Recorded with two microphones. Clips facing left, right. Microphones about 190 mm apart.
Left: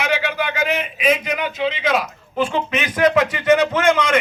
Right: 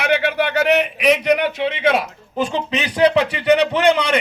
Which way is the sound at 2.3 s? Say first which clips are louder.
Even; 15° right (ahead or behind).